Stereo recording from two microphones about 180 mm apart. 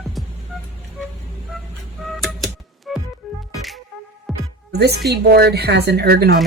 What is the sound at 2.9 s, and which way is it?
Music, centre (ahead or behind).